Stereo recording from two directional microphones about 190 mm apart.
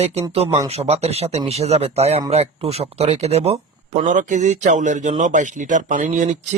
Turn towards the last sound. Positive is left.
turn(degrees=-40)  # may be behind; listen again after turning